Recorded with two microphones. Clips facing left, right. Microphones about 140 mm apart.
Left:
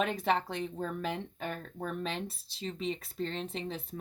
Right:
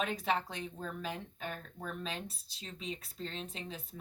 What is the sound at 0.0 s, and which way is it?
Speech, 60° left (ahead or behind).